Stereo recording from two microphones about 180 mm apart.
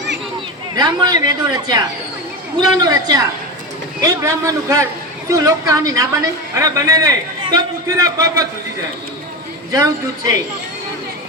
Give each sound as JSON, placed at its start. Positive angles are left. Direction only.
{"t": 0.8, "sound": "a woman's voice", "side_deg": -25}
{"t": 9.7, "sound": "a man's voice", "side_deg": -20}